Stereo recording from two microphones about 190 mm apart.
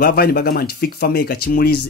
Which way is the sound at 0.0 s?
55° left (ahead or behind).